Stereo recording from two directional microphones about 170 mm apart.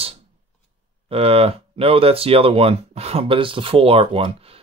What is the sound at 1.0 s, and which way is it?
Speech, 35° right (ahead or behind).